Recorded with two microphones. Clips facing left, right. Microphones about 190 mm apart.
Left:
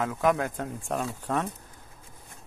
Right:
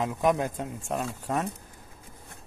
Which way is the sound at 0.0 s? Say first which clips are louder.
Even; 20° right (ahead or behind).